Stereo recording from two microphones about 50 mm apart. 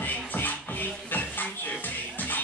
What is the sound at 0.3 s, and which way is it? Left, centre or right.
Music, left.